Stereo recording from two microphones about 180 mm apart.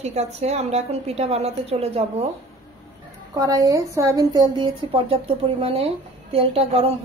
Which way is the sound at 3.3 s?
20° right (ahead or behind).